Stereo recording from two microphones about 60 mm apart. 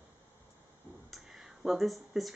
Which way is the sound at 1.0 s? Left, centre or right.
Centre.